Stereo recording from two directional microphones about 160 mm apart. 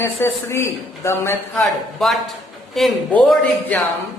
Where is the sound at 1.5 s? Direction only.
Centre (ahead or behind).